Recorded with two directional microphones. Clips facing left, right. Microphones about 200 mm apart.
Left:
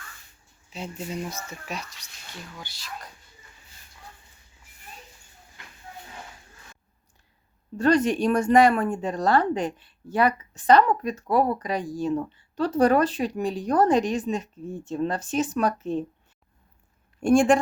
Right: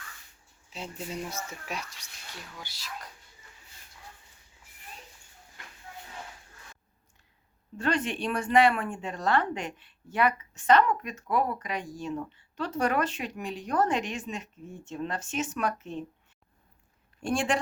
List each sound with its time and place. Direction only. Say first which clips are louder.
0.7 s speech: left 4 dB; centre (ahead or behind)
1.5 s speech: left 2 dB; 10° right (ahead or behind)
7.8 s speech: left 9 dB; 40° left (ahead or behind)
17.2 s a woman's voice: left 10 dB; 45° left (ahead or behind)